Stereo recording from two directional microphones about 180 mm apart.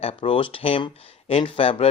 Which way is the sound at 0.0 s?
30° left (ahead or behind).